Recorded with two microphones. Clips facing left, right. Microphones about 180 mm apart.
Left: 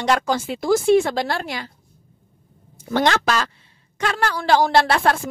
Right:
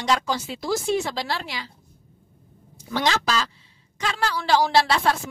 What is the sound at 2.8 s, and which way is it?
Speech, 55° left (ahead or behind).